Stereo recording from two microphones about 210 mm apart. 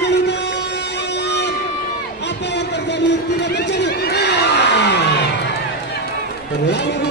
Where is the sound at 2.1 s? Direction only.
55° left (ahead or behind).